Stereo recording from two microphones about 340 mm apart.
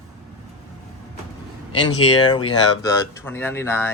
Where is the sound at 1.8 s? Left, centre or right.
Left.